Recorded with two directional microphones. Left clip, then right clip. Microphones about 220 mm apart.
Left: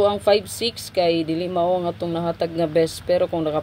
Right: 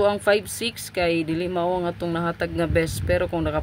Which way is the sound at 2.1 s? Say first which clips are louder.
Left 2 dB; 90° right.